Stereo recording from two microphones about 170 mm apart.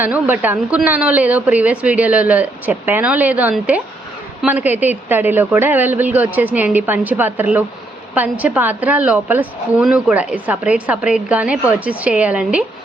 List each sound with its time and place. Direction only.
0.0 s a woman's voice: 10° right (ahead or behind)